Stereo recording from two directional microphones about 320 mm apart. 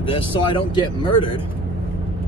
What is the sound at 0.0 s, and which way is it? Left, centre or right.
Speech, centre.